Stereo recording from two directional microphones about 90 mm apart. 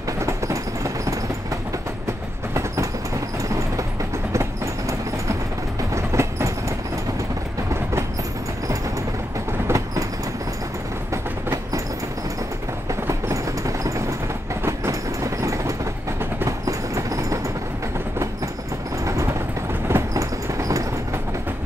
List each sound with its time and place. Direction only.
0.2 s a sound: 35° right (ahead or behind)
2.5 s train: 35° right (ahead or behind)
4.3 s train: 35° right (ahead or behind)
5.9 s train: 30° right (ahead or behind)
9.5 s train: 35° right (ahead or behind)
13.3 s train: 35° right (ahead or behind)
19.9 s vehicle: 35° right (ahead or behind)